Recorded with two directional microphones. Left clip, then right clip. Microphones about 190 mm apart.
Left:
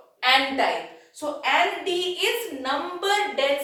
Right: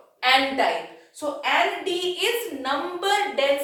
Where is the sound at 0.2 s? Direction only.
20° right (ahead or behind).